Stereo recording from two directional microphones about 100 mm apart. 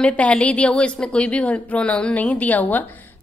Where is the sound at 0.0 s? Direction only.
15° left (ahead or behind).